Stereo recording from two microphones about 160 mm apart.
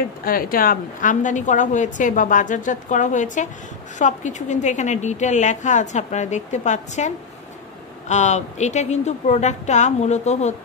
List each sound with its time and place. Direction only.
0.2 s a woman's voice: 65° left (ahead or behind); by 7.1 s 50° left (ahead or behind)
8.1 s a woman's voice: 45° left (ahead or behind)